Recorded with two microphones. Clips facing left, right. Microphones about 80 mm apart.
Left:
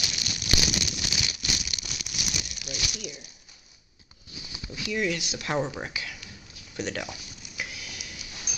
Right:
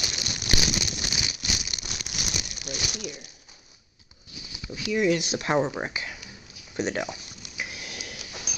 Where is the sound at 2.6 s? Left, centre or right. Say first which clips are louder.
Right 4 dB; right.